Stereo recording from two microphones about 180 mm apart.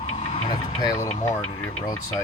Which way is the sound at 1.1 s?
40° left (ahead or behind).